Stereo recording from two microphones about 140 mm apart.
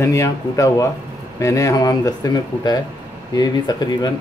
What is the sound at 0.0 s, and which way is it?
Speech, 20° left (ahead or behind).